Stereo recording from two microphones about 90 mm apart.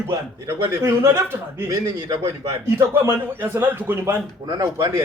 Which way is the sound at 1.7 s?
45° right (ahead or behind).